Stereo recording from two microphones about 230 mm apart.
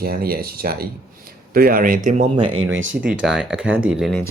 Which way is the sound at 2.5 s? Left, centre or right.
Right.